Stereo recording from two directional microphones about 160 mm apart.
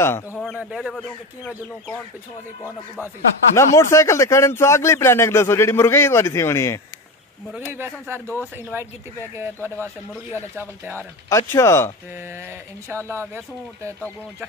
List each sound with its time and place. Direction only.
0.0 s a man's voice: 15° left (ahead or behind)
0.6 s speech: 5° right (ahead or behind)
3.5 s a man's voice: 15° left (ahead or behind)
7.5 s speech: 15° right (ahead or behind)
11.2 s a man's voice: 15° left (ahead or behind)
12.1 s speech: 15° right (ahead or behind)